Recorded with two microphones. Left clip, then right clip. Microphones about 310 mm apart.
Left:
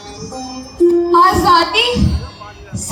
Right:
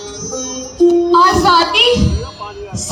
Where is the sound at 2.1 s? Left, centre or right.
Right.